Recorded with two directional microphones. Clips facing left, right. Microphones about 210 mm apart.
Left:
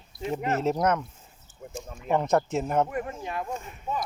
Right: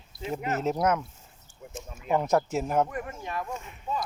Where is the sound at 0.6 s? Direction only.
5° right (ahead or behind).